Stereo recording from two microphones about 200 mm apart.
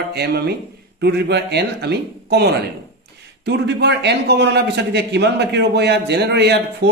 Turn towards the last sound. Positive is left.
turn(degrees=-55)  # may be behind; listen again after turning